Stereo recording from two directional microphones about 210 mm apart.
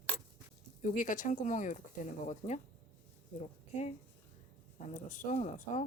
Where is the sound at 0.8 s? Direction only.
35° left (ahead or behind).